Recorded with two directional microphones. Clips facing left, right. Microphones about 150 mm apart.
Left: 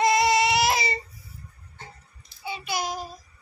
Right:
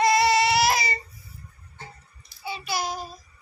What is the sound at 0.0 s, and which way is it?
Baby cry, 20° left (ahead or behind).